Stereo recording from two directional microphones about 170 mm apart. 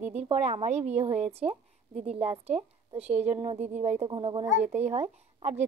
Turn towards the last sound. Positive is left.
turn(degrees=-40)  # may be behind; listen again after turning